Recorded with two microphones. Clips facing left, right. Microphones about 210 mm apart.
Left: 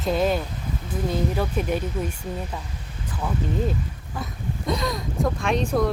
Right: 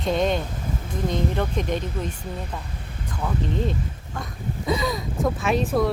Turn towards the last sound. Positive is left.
turn(degrees=0)  # may be behind; listen again after turning